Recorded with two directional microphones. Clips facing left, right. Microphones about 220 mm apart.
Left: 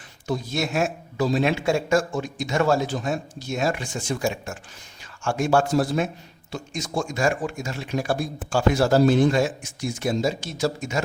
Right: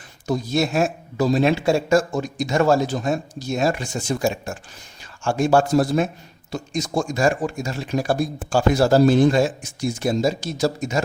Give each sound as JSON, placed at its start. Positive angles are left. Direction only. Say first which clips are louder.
{"t": 0.3, "sound": "speech", "louder": "right 5 dB", "side_deg": -40}